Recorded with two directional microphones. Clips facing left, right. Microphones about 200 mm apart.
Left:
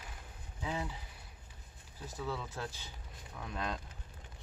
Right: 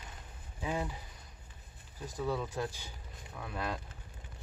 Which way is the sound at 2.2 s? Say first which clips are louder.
Right 5 dB; 15° right (ahead or behind).